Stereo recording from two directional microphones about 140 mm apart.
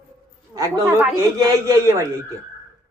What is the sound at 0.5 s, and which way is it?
Speech, 25° right (ahead or behind).